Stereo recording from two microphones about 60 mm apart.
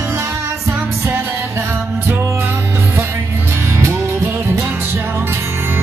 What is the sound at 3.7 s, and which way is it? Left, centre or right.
Music, right.